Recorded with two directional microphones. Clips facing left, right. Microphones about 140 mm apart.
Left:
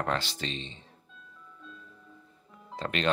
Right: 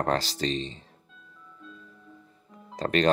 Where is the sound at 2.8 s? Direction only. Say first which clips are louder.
Right 7 dB; 40° right (ahead or behind).